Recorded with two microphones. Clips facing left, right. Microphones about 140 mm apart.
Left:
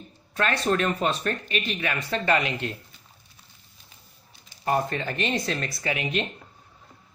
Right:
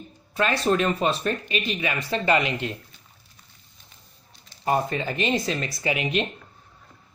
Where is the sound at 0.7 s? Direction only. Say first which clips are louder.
Right 2 dB; 20° right (ahead or behind).